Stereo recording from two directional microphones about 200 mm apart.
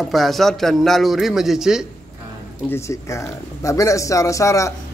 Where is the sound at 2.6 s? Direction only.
15° left (ahead or behind).